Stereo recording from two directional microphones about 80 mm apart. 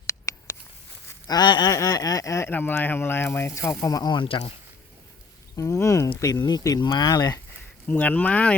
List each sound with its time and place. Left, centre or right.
0.1 s a sound: left
1.3 s speech: left
1.7 s speech: left
2.5 s speech: left
4.1 s speech: left
5.5 s speech: left
6.4 s speech: left
7.9 s speech: centre